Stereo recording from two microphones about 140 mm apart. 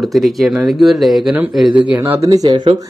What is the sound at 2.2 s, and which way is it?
Speech, 25° right (ahead or behind).